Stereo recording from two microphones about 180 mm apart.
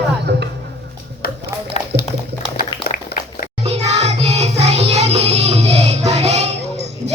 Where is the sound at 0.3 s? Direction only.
70° right (ahead or behind).